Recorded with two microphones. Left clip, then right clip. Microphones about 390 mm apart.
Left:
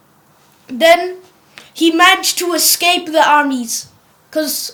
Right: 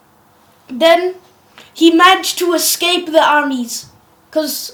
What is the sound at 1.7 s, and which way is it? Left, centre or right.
Speech, left.